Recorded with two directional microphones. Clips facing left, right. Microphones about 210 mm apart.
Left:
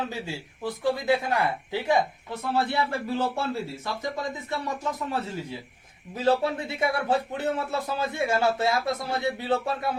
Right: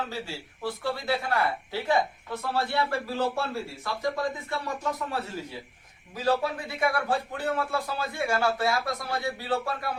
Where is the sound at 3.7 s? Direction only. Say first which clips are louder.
Left 1 dB; 20° left (ahead or behind).